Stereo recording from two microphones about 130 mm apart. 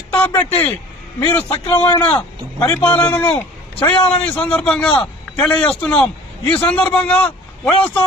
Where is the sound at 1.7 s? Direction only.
30° left (ahead or behind).